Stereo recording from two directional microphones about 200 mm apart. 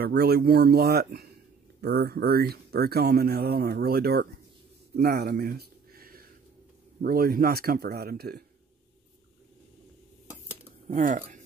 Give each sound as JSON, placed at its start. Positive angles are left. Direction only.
{"t": 0.0, "sound": "speech", "side_deg": -50}
{"t": 4.9, "sound": "a sound", "side_deg": -50}
{"t": 7.0, "sound": "speech", "side_deg": -45}
{"t": 10.9, "sound": "speech", "side_deg": -40}